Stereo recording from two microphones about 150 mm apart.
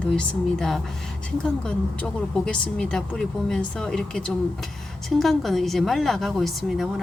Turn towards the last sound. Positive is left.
turn(degrees=0)  # may be behind; listen again after turning